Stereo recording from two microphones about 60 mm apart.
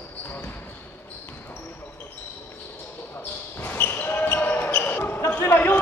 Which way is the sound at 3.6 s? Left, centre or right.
Left.